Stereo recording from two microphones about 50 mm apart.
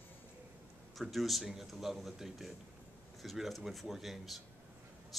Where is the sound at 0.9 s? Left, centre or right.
Centre.